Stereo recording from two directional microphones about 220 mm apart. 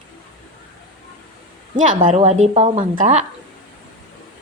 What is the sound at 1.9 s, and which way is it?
A woman's voice, 35° right (ahead or behind).